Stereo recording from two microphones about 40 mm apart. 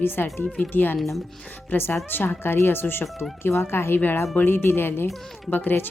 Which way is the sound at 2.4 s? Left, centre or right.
Left.